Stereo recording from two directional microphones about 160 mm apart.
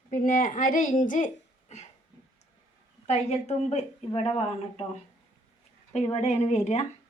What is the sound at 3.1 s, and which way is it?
A woman's voice, 45° left (ahead or behind).